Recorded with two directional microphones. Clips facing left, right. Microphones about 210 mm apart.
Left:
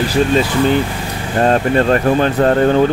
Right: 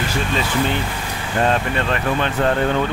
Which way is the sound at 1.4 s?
40° left (ahead or behind).